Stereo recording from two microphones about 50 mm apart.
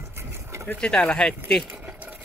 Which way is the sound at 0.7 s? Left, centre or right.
Left.